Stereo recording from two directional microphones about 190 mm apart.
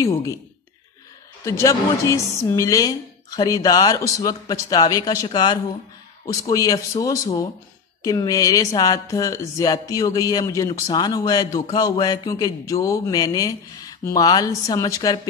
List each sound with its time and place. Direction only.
0.0 s a woman's voice: 15° left (ahead or behind)
1.4 s a woman's voice: 15° left (ahead or behind)